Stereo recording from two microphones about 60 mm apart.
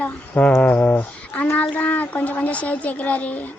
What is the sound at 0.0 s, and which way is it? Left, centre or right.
A woman's voice, left.